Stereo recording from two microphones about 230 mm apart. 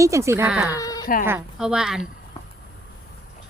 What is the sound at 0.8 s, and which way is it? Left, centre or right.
Baby cry, centre.